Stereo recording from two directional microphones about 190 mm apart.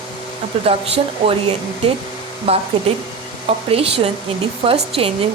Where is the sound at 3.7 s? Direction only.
30° right (ahead or behind).